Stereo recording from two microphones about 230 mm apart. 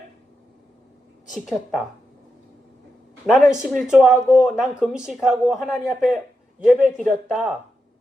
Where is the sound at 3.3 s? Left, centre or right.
Centre.